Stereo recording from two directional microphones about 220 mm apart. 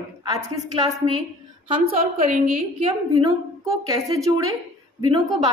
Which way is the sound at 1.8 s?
40° right (ahead or behind).